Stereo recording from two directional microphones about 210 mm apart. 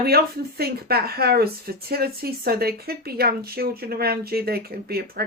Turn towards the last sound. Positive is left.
turn(degrees=-45)  # may be behind; listen again after turning